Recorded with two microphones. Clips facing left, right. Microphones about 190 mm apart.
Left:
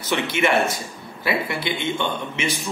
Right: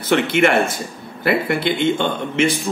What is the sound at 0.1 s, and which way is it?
Speech, 55° right (ahead or behind).